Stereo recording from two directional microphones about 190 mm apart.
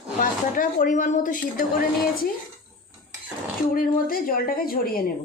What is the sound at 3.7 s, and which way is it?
Speech, 50° left (ahead or behind).